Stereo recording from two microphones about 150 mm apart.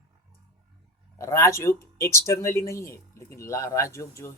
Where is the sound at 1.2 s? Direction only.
20° left (ahead or behind).